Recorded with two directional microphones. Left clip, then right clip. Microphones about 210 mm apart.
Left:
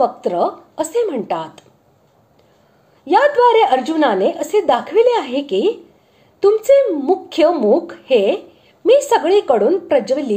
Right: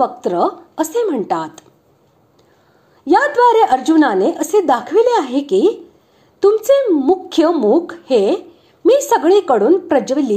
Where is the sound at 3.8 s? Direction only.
30° right (ahead or behind).